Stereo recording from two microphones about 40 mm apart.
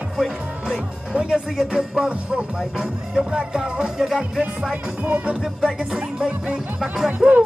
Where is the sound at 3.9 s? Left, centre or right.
Centre.